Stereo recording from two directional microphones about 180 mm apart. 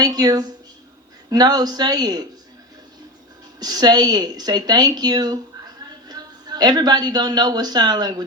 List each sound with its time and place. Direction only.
0.0 s a man's voice: 20° right (ahead or behind)
3.6 s speech: 20° right (ahead or behind)